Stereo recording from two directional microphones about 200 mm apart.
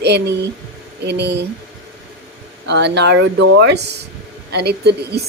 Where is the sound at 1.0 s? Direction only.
60° right (ahead or behind).